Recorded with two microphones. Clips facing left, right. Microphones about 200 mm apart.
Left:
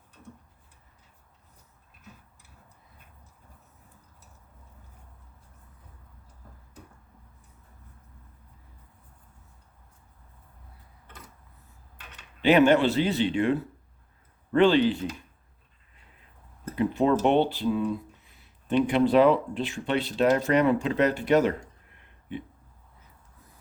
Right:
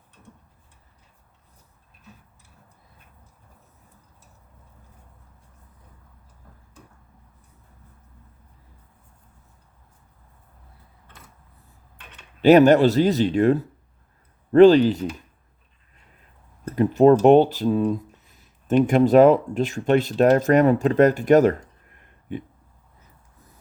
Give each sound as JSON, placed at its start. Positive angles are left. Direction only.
{"t": 12.4, "sound": "a man's voice", "side_deg": -40}
{"t": 16.7, "sound": "speech", "side_deg": -45}